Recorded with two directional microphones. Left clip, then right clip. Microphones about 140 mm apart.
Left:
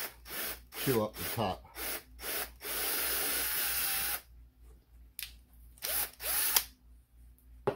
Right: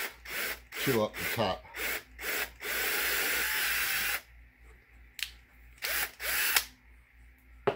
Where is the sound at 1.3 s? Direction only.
20° left (ahead or behind).